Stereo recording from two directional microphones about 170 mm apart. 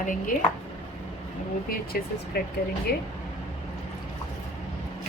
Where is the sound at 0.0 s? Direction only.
50° left (ahead or behind).